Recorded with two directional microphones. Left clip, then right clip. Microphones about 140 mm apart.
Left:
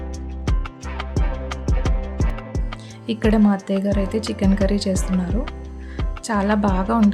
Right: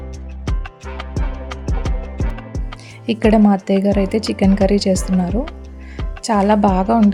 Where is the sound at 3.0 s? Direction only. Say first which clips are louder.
Right 5 dB; 30° right (ahead or behind).